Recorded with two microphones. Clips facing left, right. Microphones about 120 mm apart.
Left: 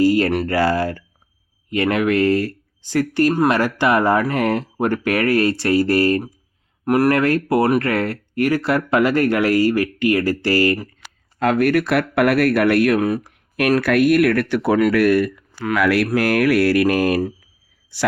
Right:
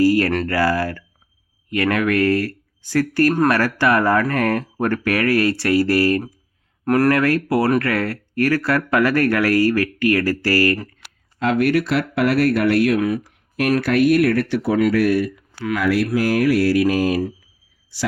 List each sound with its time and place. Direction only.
0.0 s a sound: 25° left (ahead or behind)
0.4 s speech: 25° left (ahead or behind)
6.8 s speech: 10° left (ahead or behind)
7.1 s speech: 25° left (ahead or behind)
11.3 s speech: 45° left (ahead or behind); by 16.0 s 65° left (ahead or behind)
16.1 s mantra: 65° left (ahead or behind)
17.9 s speech: 55° left (ahead or behind)